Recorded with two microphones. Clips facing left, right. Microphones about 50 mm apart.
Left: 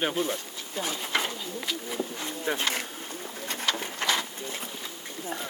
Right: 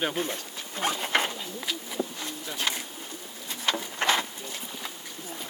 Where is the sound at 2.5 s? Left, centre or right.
Left.